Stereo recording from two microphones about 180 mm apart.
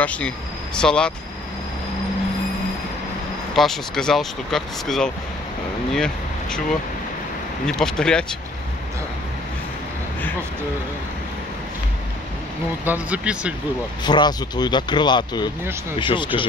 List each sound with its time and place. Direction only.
0.0 s speech: 5° left (ahead or behind)
3.5 s speech: centre (ahead or behind)
7.6 s speech: 5° left (ahead or behind)
12.8 s speech: 10° right (ahead or behind)
14.0 s speech: 25° left (ahead or behind)